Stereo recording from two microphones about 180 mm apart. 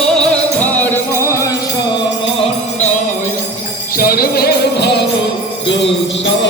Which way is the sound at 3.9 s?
55° left (ahead or behind).